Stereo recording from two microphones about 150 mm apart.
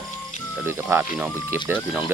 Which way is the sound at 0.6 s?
15° right (ahead or behind).